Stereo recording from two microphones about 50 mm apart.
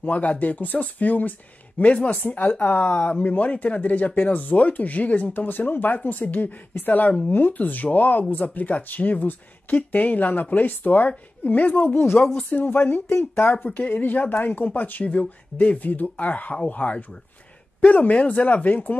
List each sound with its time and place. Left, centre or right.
0.0 s speech: left
2.2 s speech: left